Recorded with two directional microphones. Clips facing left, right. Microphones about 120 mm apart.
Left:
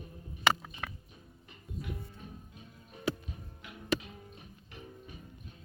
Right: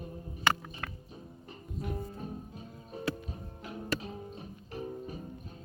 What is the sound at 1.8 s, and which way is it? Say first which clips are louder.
Music: right 6 dB; 35° right (ahead or behind).